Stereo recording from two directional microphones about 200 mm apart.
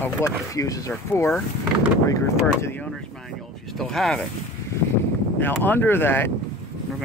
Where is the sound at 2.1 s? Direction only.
15° left (ahead or behind).